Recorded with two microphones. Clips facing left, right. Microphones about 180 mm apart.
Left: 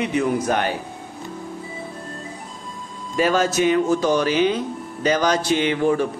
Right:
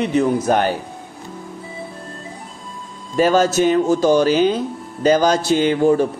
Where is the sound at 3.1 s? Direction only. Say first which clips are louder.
Right 4 dB; 40° right (ahead or behind).